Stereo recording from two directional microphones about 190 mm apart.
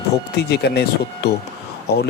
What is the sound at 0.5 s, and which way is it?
Speech, 60° left (ahead or behind).